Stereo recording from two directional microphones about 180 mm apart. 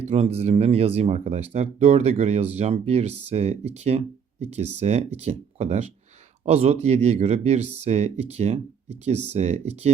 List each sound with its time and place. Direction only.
0.0 s speech: 35° right (ahead or behind)